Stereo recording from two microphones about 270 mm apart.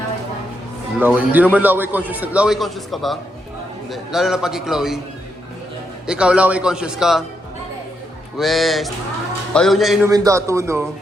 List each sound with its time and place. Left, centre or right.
0.9 s a man's voice: centre
6.1 s a man's voice: centre
8.4 s a man's voice: centre
10.1 s speech: centre